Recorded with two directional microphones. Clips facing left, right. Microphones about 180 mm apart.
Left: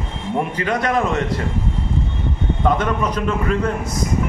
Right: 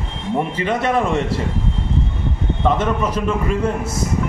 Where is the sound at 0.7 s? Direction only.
25° right (ahead or behind).